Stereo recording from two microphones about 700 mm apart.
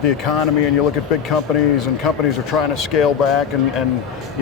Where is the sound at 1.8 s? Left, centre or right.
Left.